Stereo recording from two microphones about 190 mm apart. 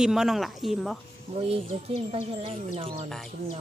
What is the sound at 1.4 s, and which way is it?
Speech, 30° right (ahead or behind).